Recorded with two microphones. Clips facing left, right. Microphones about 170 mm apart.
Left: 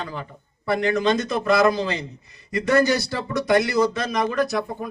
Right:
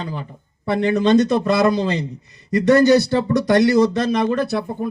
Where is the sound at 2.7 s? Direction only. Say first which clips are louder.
Right 6 dB; 35° right (ahead or behind).